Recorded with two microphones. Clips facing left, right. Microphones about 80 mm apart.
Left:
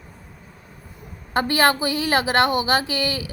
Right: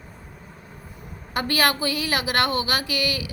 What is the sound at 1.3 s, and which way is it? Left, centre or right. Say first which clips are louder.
A woman's voice: left 4 dB; left.